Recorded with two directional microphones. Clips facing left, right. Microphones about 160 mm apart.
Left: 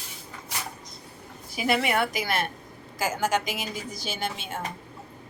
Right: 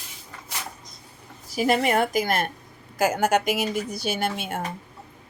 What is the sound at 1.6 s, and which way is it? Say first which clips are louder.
Speech: right 4 dB; 40° right (ahead or behind).